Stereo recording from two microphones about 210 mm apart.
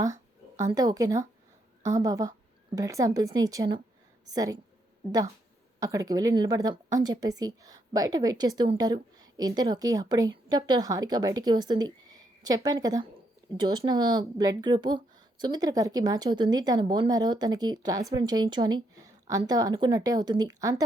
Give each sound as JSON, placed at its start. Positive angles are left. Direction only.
{"t": 0.0, "sound": "a woman's voice", "side_deg": -15}
{"t": 5.8, "sound": "a woman's voice", "side_deg": -15}